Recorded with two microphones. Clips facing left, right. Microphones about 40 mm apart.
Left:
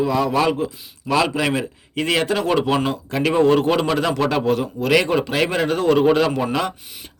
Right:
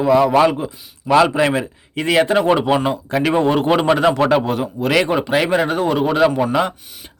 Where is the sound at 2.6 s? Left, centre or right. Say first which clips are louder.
Right 2 dB; centre.